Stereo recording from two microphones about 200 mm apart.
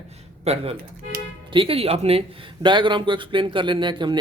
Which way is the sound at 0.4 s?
30° right (ahead or behind).